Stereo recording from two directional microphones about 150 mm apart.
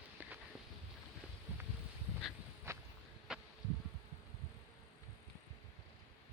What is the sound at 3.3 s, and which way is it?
Bee, 5° right (ahead or behind).